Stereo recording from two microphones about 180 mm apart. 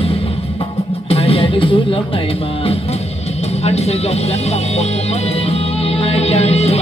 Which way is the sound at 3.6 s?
35° left (ahead or behind).